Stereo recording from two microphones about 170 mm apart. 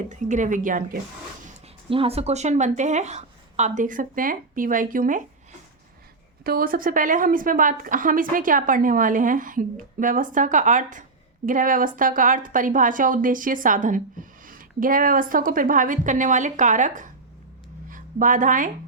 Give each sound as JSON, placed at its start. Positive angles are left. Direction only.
{"t": 0.1, "sound": "a woman's voice", "side_deg": -45}
{"t": 1.9, "sound": "a woman's voice", "side_deg": -35}
{"t": 6.4, "sound": "a woman's voice", "side_deg": -60}